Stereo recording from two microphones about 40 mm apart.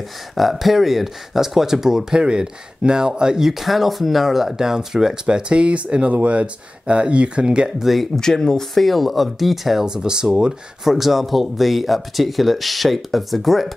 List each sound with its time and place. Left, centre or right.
0.4 s speech: centre; by 7.7 s right
7.8 s speech: centre
8.2 s speech: centre
8.7 s speech: centre
9.8 s speech: centre
10.8 s speech: centre